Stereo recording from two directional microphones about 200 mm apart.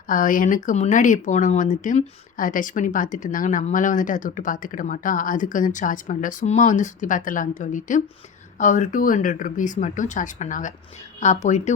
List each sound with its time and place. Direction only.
0.1 s speech: 40° left (ahead or behind)